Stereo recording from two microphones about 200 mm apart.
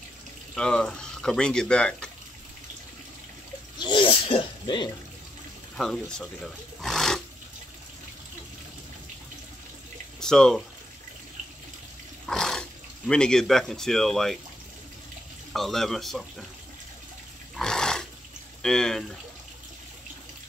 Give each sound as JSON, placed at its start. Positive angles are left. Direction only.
{"t": 0.6, "sound": "speech", "side_deg": 5}
{"t": 3.7, "sound": "sneeze", "side_deg": 25}
{"t": 5.8, "sound": "speech", "side_deg": 5}
{"t": 10.2, "sound": "speech", "side_deg": 5}
{"t": 12.3, "sound": "speech", "side_deg": 5}
{"t": 15.5, "sound": "speech", "side_deg": 0}
{"t": 17.6, "sound": "dog", "side_deg": 5}
{"t": 18.6, "sound": "speech", "side_deg": 5}